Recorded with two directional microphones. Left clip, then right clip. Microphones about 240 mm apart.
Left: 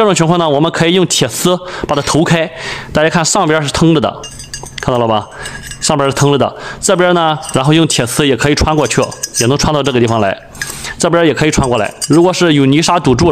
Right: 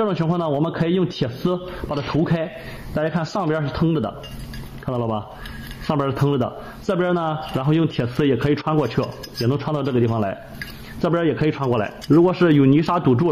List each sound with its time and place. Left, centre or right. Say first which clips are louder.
0.0 s a man's voice: left 12 dB; left